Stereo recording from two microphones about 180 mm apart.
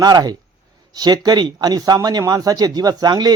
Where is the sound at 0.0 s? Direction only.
20° right (ahead or behind).